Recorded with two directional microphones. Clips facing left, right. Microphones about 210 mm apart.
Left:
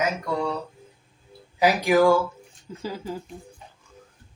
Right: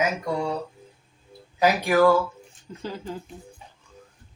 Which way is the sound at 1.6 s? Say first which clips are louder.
Even; 15° left (ahead or behind).